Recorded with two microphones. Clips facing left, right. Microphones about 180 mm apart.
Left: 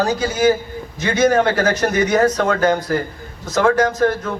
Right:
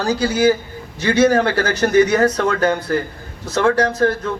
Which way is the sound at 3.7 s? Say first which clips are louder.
Even; 30° right (ahead or behind).